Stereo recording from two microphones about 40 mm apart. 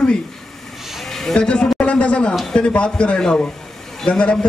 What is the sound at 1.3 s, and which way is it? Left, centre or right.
Speech, left.